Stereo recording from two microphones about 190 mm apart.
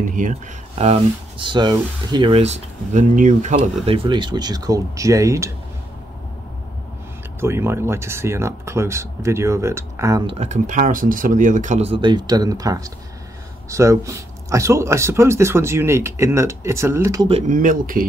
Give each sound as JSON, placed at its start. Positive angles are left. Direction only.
{"t": 0.0, "sound": "speech", "side_deg": -45}
{"t": 3.5, "sound": "speech", "side_deg": -30}
{"t": 7.3, "sound": "speech", "side_deg": -10}
{"t": 10.2, "sound": "speech", "side_deg": -35}
{"t": 17.3, "sound": "speech", "side_deg": -40}